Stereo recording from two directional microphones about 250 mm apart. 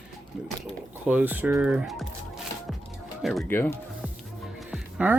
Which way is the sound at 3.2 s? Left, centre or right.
Centre.